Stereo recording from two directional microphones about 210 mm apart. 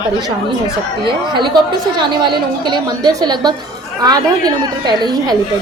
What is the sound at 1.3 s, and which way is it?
A woman's voice, 20° right (ahead or behind).